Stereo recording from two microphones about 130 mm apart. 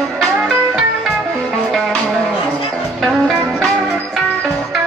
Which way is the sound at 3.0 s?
5° right (ahead or behind).